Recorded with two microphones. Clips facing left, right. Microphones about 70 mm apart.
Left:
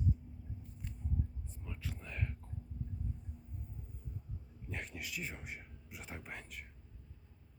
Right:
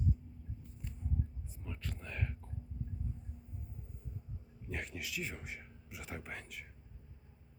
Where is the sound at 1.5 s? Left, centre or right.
Centre.